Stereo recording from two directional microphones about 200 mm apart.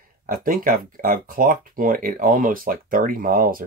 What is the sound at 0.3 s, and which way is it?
Speech, 45° right (ahead or behind).